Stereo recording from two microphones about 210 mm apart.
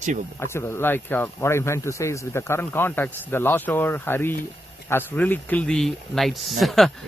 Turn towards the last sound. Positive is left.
turn(degrees=0)  # may be behind; listen again after turning